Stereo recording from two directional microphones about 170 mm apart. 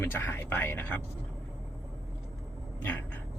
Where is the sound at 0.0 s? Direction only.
15° left (ahead or behind).